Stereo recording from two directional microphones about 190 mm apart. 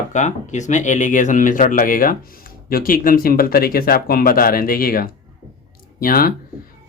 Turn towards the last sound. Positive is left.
turn(degrees=50)  # may be behind; listen again after turning